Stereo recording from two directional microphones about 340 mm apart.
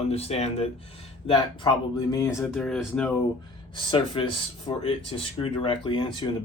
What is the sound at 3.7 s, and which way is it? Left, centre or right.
Speech, centre.